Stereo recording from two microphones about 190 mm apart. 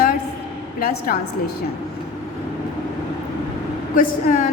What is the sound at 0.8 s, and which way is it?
Speech, 50° left (ahead or behind).